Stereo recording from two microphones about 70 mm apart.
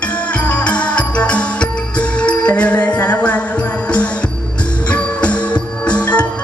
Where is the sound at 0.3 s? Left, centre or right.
Left.